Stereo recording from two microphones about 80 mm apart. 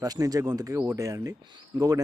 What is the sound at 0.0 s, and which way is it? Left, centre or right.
Speech, right.